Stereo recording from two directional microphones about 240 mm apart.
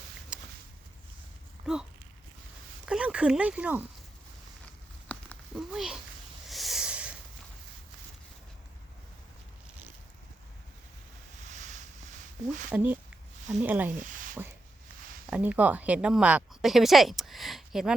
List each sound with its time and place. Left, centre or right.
0.3 s a sound: centre
1.7 s speech: centre
2.8 s speech: centre
4.6 s a sound: centre
11.5 s boat: right
12.7 s speech: centre
15.3 s a woman's voice: centre